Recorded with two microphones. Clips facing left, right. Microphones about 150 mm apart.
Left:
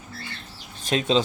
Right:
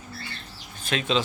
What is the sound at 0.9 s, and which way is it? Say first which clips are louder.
Speech: left 4 dB; 30° left (ahead or behind).